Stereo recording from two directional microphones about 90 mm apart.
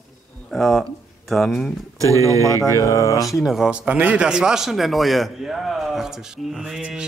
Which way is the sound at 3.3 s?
Centre (ahead or behind).